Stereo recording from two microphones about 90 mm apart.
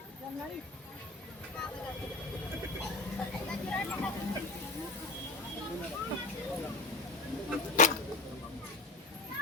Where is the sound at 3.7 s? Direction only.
10° left (ahead or behind).